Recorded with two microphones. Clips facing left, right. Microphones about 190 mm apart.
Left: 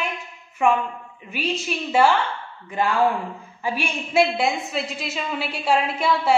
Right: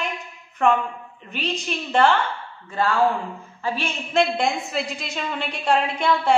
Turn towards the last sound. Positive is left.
turn(degrees=5)  # may be behind; listen again after turning